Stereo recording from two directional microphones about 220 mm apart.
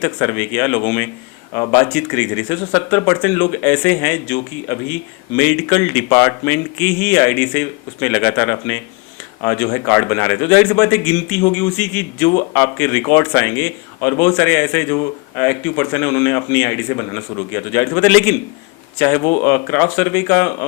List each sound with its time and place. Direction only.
0.0 s a man's voice: 15° left (ahead or behind)
19.2 s speech: 25° left (ahead or behind)
19.5 s a man's voice: 15° left (ahead or behind)